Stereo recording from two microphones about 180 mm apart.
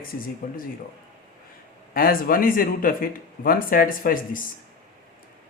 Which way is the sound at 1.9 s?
55° left (ahead or behind).